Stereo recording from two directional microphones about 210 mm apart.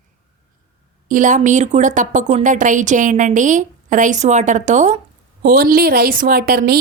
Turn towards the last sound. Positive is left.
turn(degrees=-45)  # may be behind; listen again after turning